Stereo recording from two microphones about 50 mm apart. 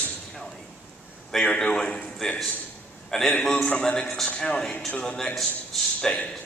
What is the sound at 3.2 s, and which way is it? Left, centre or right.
Speech, left.